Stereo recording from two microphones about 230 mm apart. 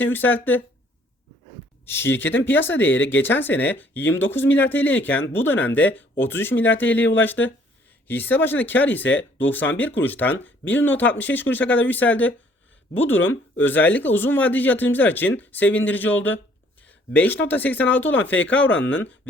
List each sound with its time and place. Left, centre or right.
0.0 s speech: centre
1.8 s speech: centre
2.0 s speech: left
2.4 s speech: centre